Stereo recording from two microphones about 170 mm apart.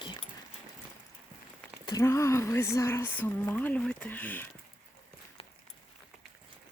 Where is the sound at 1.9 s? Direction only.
20° left (ahead or behind).